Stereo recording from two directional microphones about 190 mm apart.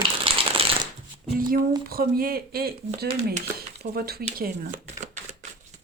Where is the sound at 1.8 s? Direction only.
50° right (ahead or behind).